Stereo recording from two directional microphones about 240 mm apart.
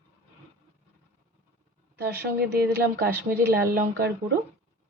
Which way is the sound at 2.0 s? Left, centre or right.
Right.